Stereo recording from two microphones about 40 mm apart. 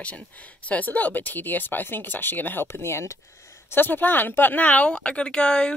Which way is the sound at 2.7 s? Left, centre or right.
Left.